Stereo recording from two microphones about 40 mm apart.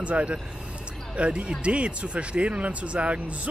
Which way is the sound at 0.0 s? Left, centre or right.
Right.